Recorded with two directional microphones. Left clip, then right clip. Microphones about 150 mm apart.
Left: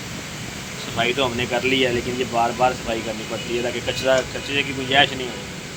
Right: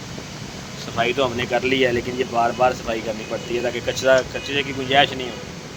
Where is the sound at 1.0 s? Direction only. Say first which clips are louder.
Right 1 dB; 80° right.